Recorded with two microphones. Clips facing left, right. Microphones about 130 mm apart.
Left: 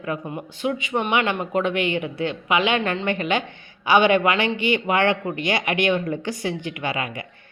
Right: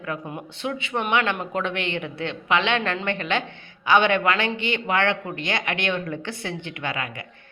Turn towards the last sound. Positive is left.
turn(degrees=15)  # may be behind; listen again after turning